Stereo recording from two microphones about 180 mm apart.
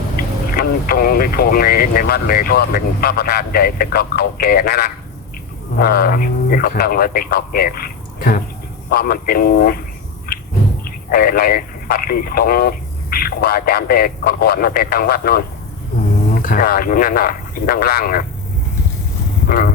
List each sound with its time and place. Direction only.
0.2 s speech: 55° left (ahead or behind)
10.8 s speech: 55° left (ahead or behind)